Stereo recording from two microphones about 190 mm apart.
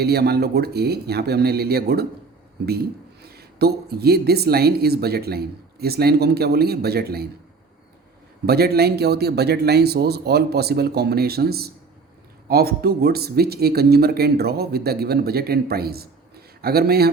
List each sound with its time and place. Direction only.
0.0 s speech: 55° right (ahead or behind)
8.4 s speech: 55° right (ahead or behind)